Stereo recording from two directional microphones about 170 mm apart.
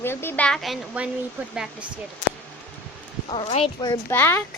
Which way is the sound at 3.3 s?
40° left (ahead or behind).